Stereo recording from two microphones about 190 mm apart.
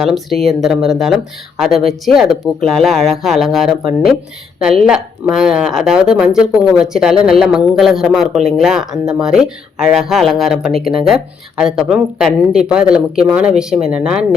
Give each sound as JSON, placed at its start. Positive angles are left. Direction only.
{"t": 0.0, "sound": "speech", "side_deg": 0}
{"t": 5.3, "sound": "speech", "side_deg": -5}